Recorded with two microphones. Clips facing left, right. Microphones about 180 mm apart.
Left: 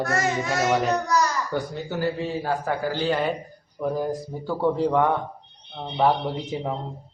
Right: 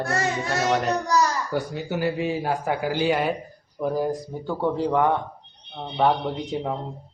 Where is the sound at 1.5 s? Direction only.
10° right (ahead or behind).